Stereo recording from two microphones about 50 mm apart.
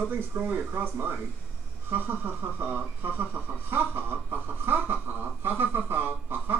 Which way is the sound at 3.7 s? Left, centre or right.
Right.